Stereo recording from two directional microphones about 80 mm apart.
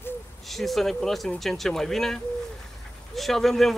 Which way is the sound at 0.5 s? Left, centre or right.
Centre.